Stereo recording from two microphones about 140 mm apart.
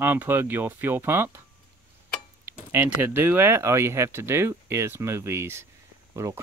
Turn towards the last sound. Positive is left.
turn(degrees=-20)  # may be behind; listen again after turning